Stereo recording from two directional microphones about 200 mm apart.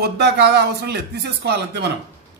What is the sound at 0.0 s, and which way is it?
Speech, 55° right (ahead or behind).